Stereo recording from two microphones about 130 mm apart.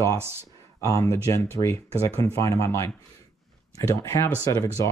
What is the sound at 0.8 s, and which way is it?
Speech, 25° left (ahead or behind).